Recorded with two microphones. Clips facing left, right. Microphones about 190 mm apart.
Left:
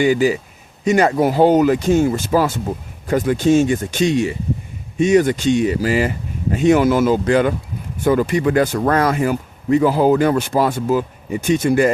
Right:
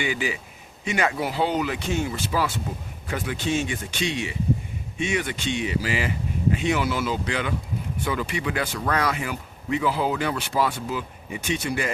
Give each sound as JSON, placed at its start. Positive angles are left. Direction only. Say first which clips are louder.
{"t": 0.0, "sound": "speech", "louder": "left 12 dB", "side_deg": 40}